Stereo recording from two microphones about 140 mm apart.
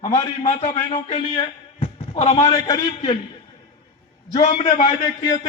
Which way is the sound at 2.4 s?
30° left (ahead or behind).